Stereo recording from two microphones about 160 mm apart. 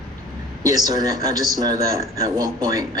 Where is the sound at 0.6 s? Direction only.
25° right (ahead or behind).